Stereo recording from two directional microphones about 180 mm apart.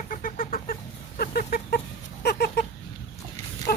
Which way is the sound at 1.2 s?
60° left (ahead or behind).